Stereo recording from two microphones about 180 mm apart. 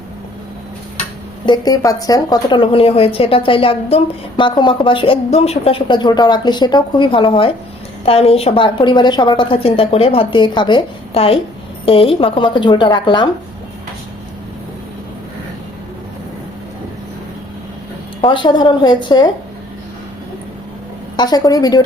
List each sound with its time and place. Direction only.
1.5 s a woman's voice: 20° left (ahead or behind)
18.2 s a woman's voice: 25° left (ahead or behind)
21.2 s a woman's voice: 20° left (ahead or behind)